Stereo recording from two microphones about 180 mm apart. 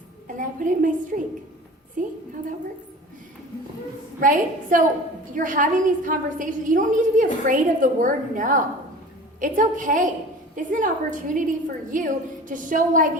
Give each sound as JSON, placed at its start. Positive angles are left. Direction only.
{"t": 0.3, "sound": "a sound", "side_deg": -45}
{"t": 2.0, "sound": "a woman's voice", "side_deg": -50}
{"t": 4.2, "sound": "a woman's voice", "side_deg": -50}